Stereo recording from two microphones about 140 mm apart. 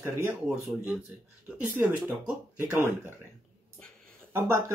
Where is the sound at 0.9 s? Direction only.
5° right (ahead or behind).